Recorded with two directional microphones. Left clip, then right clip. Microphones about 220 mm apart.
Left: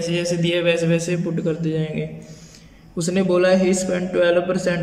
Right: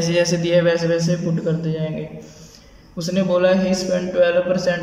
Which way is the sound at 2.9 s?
25° left (ahead or behind).